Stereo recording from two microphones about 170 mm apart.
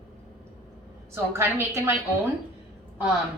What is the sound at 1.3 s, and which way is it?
Speech, 15° right (ahead or behind).